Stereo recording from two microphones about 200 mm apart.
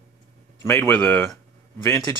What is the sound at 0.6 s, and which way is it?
Speech, 10° left (ahead or behind).